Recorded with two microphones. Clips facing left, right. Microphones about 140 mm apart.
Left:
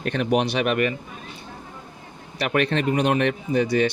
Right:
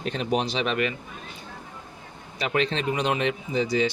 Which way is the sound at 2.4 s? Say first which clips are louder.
Left 3 dB; 60° left (ahead or behind).